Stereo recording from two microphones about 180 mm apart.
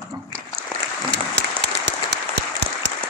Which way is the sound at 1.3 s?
70° right (ahead or behind).